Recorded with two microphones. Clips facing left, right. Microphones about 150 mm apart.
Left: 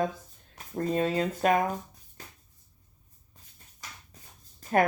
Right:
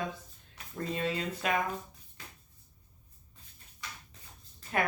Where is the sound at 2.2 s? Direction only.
45° left (ahead or behind).